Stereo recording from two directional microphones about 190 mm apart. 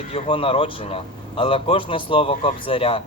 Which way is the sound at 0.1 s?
30° left (ahead or behind).